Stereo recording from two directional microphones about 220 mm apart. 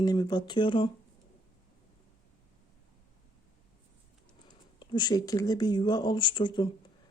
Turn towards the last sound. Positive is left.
turn(degrees=20)  # may be behind; listen again after turning